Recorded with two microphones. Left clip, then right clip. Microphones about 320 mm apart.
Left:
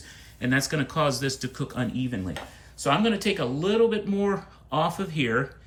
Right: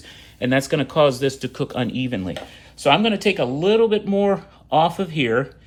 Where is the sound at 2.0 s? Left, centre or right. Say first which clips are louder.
Right 6 dB; right.